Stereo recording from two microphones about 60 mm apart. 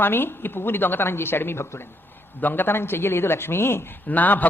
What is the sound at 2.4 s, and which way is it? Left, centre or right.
Speech, left.